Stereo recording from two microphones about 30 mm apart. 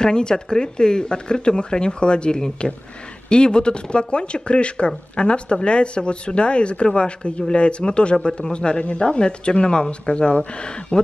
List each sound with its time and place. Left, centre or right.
0.0 s speech: left